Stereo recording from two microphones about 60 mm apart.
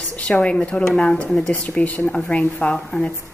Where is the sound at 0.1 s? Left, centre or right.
Left.